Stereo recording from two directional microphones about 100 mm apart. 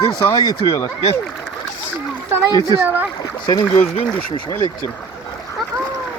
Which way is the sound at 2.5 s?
35° left (ahead or behind).